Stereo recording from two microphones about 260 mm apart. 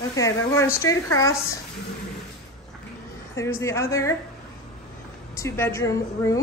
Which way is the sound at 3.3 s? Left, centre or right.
Centre.